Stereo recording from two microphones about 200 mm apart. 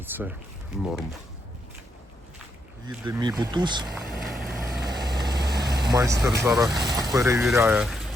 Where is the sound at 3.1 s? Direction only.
20° right (ahead or behind).